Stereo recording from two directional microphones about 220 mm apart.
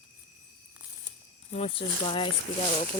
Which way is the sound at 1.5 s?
25° left (ahead or behind).